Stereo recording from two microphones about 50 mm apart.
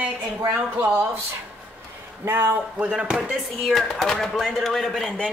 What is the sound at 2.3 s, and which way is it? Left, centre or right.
Speech, right.